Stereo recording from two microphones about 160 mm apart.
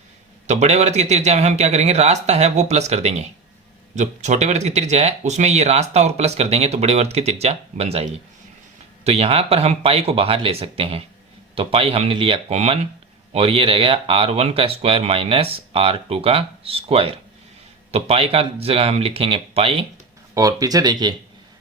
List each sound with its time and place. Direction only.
0.4 s speech: 45° right (ahead or behind)
9.0 s speech: 40° right (ahead or behind)
20.3 s speech: 20° right (ahead or behind)